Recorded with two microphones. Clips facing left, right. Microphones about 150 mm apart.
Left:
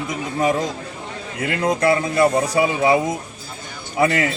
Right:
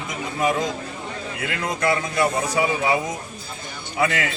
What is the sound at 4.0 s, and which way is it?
Speech, 35° left (ahead or behind).